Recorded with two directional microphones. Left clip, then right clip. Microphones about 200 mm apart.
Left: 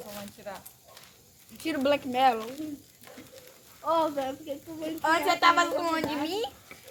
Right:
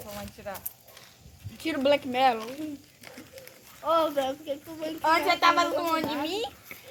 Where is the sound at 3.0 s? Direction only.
35° right (ahead or behind).